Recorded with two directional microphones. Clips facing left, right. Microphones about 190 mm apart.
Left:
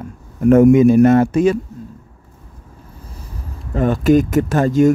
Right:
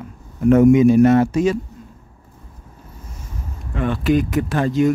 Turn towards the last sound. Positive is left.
turn(degrees=45)  # may be behind; listen again after turning